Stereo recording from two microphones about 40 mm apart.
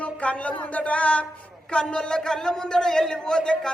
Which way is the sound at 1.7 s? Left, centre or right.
Left.